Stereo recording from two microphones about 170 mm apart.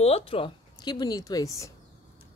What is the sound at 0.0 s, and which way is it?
Speech, 35° left (ahead or behind).